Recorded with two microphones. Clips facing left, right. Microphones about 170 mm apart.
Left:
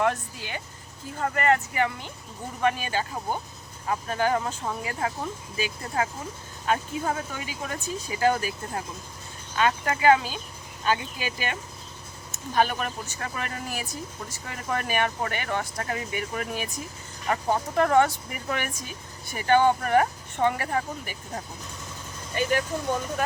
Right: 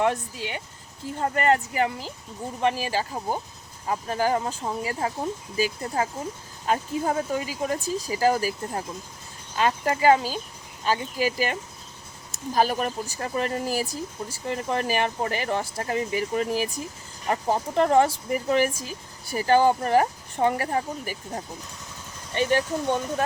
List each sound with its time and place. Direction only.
1.1 s speech: 35° right (ahead or behind)
22.4 s speech: 30° right (ahead or behind)